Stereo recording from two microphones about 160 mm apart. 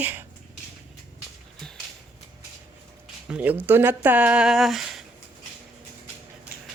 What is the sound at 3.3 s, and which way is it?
Speech, 10° right (ahead or behind).